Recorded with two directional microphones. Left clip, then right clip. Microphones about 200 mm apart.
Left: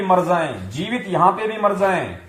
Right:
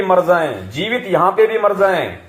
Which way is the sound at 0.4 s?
30° right (ahead or behind).